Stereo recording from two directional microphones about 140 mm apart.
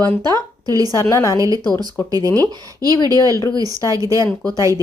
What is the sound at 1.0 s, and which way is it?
Speech, 20° left (ahead or behind).